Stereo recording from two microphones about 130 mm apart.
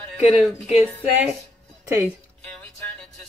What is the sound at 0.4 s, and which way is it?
Speech, 5° right (ahead or behind).